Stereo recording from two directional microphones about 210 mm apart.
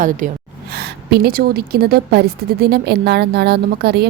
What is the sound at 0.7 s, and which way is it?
Speech, 50° right (ahead or behind).